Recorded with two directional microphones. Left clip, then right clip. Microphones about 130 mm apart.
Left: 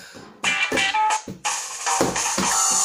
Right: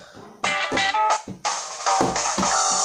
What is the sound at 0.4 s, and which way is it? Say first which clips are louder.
Music: left 1 dB; 35° right (ahead or behind).